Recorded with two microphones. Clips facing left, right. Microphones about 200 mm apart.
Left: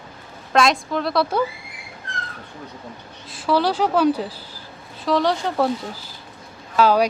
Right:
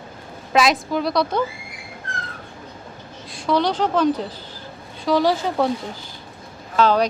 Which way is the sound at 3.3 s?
5° left (ahead or behind).